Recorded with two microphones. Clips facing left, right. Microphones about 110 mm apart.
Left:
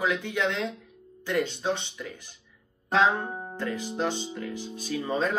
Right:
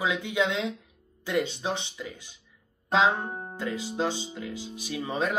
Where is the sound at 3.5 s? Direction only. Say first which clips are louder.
Even; 10° right (ahead or behind).